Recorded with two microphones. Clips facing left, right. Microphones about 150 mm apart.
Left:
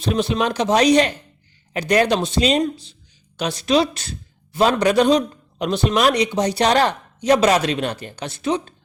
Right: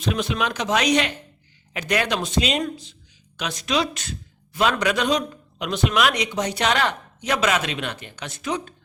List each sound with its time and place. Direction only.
0.0 s a man's voice: 30° left (ahead or behind)